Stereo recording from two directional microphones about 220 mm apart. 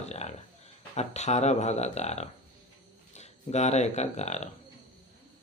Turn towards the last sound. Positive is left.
turn(degrees=30)  # may be behind; listen again after turning